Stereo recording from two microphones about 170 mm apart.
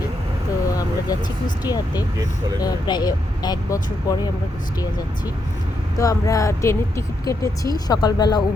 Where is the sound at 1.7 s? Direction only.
20° left (ahead or behind).